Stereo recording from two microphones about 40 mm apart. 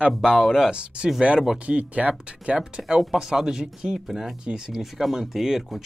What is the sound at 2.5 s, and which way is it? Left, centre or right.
Speech, centre.